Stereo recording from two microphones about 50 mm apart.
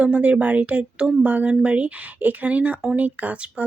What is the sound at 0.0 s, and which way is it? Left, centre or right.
Speech, right.